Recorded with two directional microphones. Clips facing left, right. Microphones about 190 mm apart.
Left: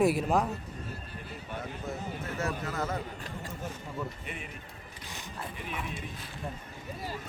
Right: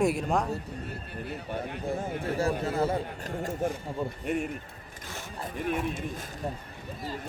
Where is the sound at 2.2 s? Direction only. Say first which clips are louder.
Right 6 dB; 30° right (ahead or behind).